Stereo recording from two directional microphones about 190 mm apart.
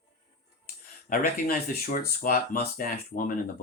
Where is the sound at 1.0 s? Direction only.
50° left (ahead or behind).